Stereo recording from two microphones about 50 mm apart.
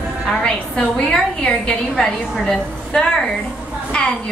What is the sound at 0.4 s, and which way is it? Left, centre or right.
A woman's voice, centre.